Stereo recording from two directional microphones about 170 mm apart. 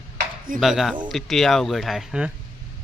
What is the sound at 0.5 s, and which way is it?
Speech, centre (ahead or behind).